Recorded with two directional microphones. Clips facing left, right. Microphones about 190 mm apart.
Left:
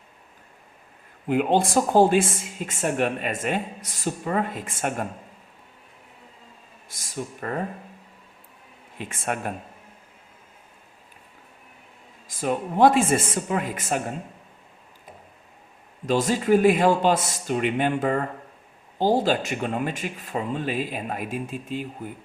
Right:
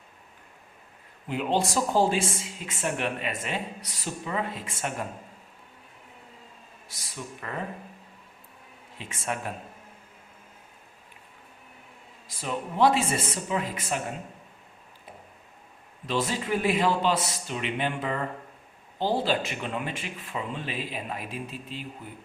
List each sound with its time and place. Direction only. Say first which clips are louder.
1.3 s speech: left 6 dB; 55° left (ahead or behind)
6.8 s a sound: left 7 dB; 50° left (ahead or behind)
9.0 s speech: left 4 dB; 55° left (ahead or behind)
12.3 s speech: left 7 dB; 50° left (ahead or behind)
16.0 s speech: left 7 dB; 45° left (ahead or behind)